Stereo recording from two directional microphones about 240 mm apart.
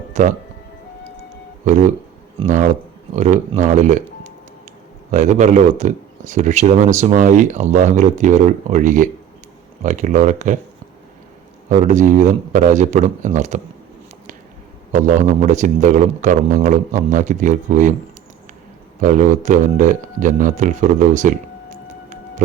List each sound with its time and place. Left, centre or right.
0.1 s music: right
1.6 s speech: right
3.2 s a man's voice: right
5.1 s a man's voice: right
11.7 s a man's voice: right
14.9 s a man's voice: right
18.9 s a man's voice: right
22.4 s music: right